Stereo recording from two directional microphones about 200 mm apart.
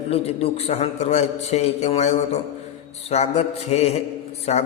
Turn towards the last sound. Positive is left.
turn(degrees=35)  # may be behind; listen again after turning